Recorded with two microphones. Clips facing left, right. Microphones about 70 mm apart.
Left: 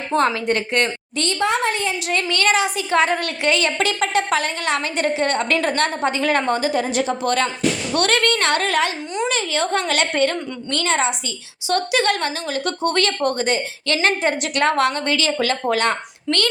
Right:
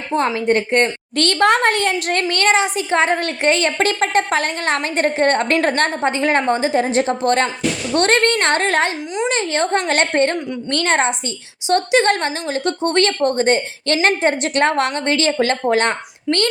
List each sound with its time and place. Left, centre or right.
0.1 s a woman's voice: centre
0.3 s a woman's voice: right
1.1 s a child's voice: right
2.3 s a woman's voice: right
11.7 s a woman's voice: right